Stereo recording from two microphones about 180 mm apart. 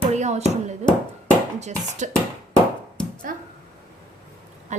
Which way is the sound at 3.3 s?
50° right (ahead or behind).